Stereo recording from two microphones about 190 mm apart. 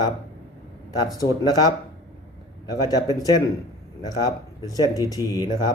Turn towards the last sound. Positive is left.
turn(degrees=20)  # may be behind; listen again after turning